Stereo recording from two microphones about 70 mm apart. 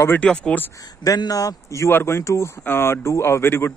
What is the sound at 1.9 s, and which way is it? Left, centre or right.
Speech, left.